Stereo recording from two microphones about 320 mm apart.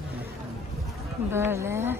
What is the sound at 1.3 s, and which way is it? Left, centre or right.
Speech, centre.